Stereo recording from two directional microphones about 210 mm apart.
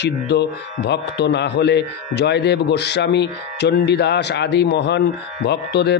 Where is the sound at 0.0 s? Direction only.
55° left (ahead or behind).